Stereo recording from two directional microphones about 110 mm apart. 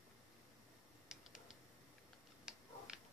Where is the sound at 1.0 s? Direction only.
5° right (ahead or behind).